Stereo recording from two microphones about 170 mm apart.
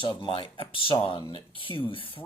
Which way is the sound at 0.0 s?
30° left (ahead or behind).